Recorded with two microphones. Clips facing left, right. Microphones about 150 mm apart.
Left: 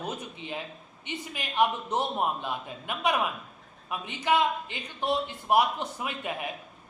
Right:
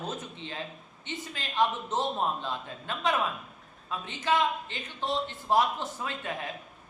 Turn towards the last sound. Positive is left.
turn(degrees=15)  # may be behind; listen again after turning